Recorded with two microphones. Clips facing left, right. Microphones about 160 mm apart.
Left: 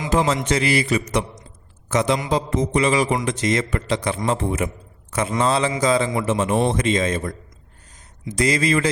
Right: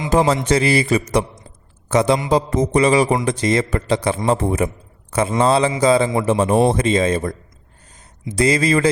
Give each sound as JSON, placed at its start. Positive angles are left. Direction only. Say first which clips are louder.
{"t": 0.1, "sound": "a man's voice", "louder": "right 4 dB", "side_deg": -35}